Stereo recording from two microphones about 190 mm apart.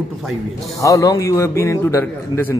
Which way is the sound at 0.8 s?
15° left (ahead or behind).